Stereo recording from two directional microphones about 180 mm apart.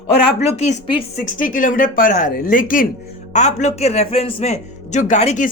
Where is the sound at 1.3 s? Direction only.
50° left (ahead or behind).